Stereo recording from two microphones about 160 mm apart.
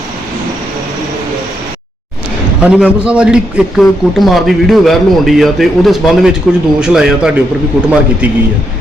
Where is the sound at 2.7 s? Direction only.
5° right (ahead or behind).